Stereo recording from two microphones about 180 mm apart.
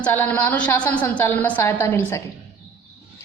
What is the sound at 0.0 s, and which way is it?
A woman's voice, 10° left (ahead or behind).